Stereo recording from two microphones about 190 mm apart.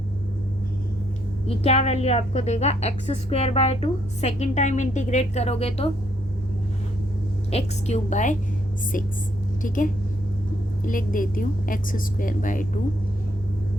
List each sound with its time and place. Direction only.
1.5 s a woman's voice: 35° left (ahead or behind)
7.5 s a woman's voice: 35° left (ahead or behind)
9.6 s a woman's voice: 45° left (ahead or behind)